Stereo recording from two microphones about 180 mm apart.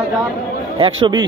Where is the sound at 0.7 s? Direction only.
30° right (ahead or behind).